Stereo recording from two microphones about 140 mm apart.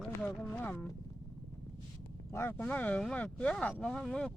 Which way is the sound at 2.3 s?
15° left (ahead or behind).